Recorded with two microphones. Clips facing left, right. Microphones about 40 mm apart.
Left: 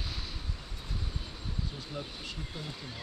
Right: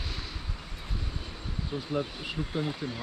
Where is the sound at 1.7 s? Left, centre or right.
Right.